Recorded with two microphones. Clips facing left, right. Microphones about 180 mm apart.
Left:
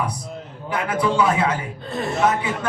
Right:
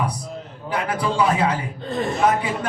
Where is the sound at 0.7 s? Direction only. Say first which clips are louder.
Left 2 dB; 35° right (ahead or behind).